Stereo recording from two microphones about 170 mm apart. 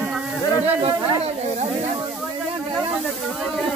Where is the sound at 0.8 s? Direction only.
35° right (ahead or behind).